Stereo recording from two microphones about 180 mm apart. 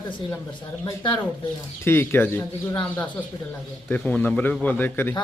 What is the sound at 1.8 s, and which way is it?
Speech, 15° left (ahead or behind).